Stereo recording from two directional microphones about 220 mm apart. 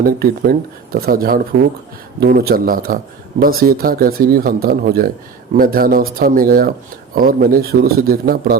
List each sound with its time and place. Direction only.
0.0 s a man's voice: 40° right (ahead or behind)